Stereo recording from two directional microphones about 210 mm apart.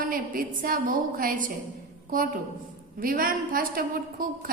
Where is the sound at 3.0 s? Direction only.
40° right (ahead or behind).